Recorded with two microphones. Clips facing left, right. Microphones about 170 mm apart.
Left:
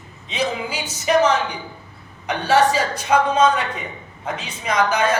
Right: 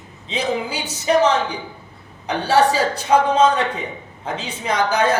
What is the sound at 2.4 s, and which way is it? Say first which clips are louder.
Speech: even; 30° right (ahead or behind).